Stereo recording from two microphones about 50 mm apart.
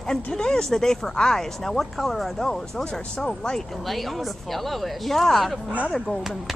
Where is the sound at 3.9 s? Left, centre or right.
Centre.